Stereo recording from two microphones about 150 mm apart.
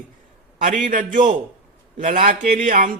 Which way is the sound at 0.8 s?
60° right (ahead or behind).